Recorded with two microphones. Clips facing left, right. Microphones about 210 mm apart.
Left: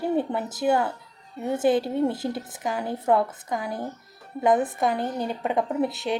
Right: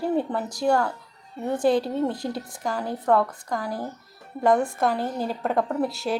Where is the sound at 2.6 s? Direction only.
5° left (ahead or behind).